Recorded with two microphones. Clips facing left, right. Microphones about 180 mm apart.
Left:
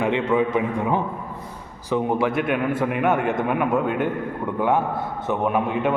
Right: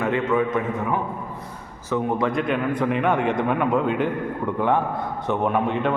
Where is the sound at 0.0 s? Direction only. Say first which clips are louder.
Left 1 dB; 15° left (ahead or behind).